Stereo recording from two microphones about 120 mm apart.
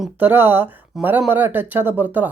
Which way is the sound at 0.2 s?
15° right (ahead or behind).